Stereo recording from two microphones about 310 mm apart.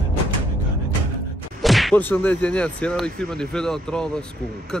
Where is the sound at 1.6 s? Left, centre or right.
Centre.